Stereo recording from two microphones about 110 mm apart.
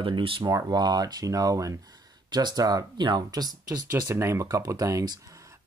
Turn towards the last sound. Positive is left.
turn(degrees=-30)  # may be behind; listen again after turning